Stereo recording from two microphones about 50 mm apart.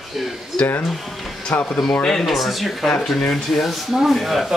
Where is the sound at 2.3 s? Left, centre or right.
Centre.